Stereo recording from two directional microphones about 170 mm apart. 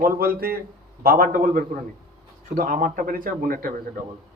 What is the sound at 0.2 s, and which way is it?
Speech, 60° right (ahead or behind).